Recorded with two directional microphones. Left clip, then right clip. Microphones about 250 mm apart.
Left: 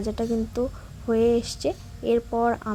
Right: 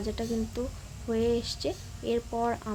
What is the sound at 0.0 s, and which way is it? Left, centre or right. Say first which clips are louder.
A woman's voice: left 6 dB; centre.